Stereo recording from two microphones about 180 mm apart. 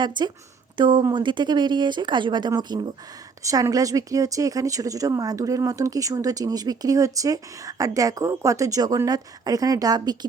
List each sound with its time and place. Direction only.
0.0 s speech: 25° right (ahead or behind)